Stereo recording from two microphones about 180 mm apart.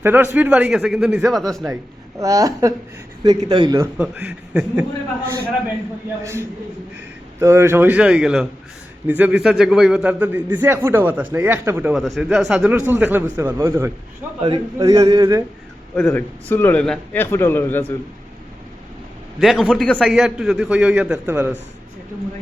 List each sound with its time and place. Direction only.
0.0 s a man's voice: 10° right (ahead or behind)
1.6 s a man's voice: 20° right (ahead or behind)
3.9 s a man's voice: 10° right (ahead or behind)
7.3 s a man's voice: 15° right (ahead or behind)
16.0 s a man's voice: 10° left (ahead or behind)
19.4 s a man's voice: centre (ahead or behind)